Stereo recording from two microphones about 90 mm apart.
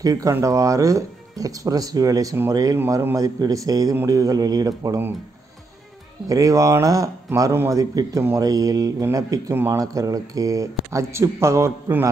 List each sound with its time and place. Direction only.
0.0 s speech: 40° right (ahead or behind)
2.9 s a man's voice: 30° right (ahead or behind)
3.2 s speech: 40° right (ahead or behind)
6.2 s speech: 40° right (ahead or behind)